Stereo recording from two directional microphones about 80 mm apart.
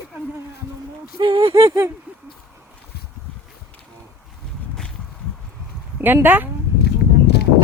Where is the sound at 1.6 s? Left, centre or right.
Right.